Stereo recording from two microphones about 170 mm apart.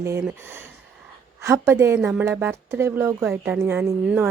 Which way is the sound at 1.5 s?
15° right (ahead or behind).